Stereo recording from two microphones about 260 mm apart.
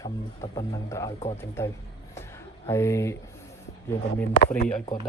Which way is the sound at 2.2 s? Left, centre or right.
Centre.